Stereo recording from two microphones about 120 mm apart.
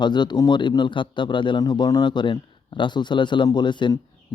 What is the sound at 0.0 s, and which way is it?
Speech, 40° left (ahead or behind).